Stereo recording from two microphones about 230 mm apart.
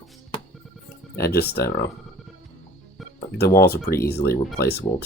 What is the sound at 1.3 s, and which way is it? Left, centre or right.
Speech, left.